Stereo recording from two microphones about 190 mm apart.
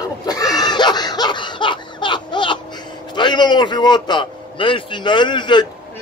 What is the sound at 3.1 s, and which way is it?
A man's voice, 25° left (ahead or behind).